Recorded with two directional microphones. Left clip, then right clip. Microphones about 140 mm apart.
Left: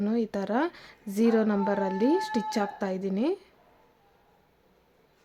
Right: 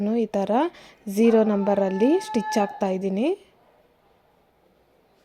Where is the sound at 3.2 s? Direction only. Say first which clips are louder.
Right 3 dB; 25° left (ahead or behind).